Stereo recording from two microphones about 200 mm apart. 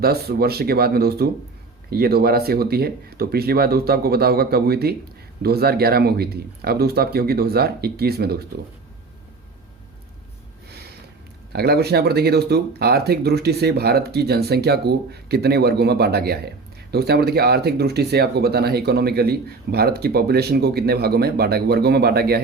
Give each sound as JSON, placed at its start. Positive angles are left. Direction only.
{"t": 0.0, "sound": "speech", "side_deg": -50}
{"t": 11.5, "sound": "speech", "side_deg": -50}